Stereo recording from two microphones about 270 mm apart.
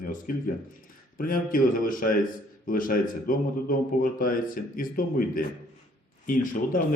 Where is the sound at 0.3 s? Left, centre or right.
Left.